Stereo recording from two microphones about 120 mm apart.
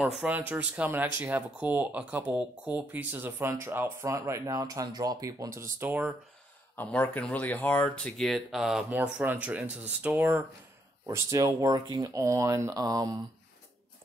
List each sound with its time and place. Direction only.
0.0 s speech: 15° right (ahead or behind)
6.8 s speech: 10° left (ahead or behind)
8.9 s speech: 15° right (ahead or behind)
11.1 s speech: 25° right (ahead or behind)